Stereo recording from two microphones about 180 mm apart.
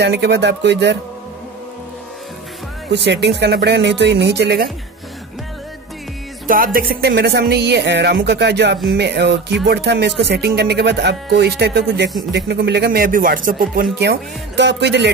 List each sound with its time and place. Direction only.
0.0 s speech: 70° right (ahead or behind)
2.9 s speech: 70° right (ahead or behind)
6.4 s speech: 50° right (ahead or behind); by 15.0 s 70° right (ahead or behind)